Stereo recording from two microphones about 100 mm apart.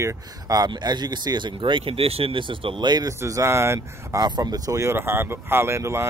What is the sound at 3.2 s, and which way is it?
Speech, 30° right (ahead or behind).